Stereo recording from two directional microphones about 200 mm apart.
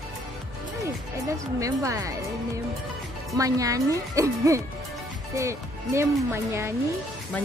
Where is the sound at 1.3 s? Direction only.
15° right (ahead or behind).